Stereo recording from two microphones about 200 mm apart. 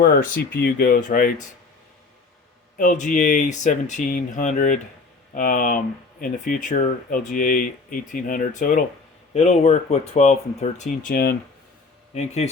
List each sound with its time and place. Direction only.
0.5 s speech: 50° left (ahead or behind)
2.7 s speech: 40° left (ahead or behind)
11.1 s speech: 50° left (ahead or behind)
12.1 s speech: 35° left (ahead or behind)